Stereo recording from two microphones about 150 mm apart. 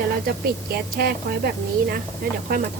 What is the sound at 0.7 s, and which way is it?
Speech, 90° right.